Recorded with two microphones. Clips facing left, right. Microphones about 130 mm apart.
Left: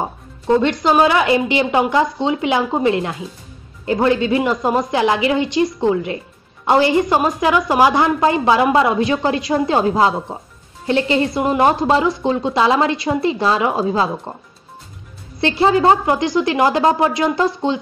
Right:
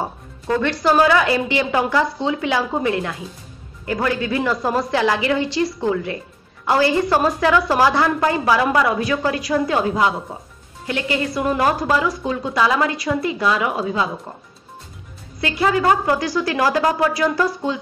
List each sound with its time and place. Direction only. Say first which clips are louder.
0.0 s a woman's voice: left 3 dB; 20° left (ahead or behind)
15.4 s a woman's voice: left 4 dB; 30° left (ahead or behind)